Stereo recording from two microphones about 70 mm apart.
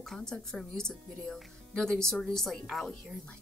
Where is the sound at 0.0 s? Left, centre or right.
Centre.